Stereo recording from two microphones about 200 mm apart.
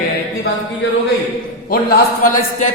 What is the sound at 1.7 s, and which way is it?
Speech, 45° left (ahead or behind).